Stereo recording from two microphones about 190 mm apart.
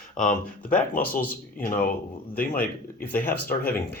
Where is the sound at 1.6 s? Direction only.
45° left (ahead or behind).